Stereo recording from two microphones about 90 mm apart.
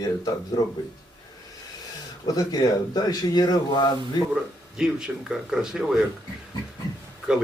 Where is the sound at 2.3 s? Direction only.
45° left (ahead or behind).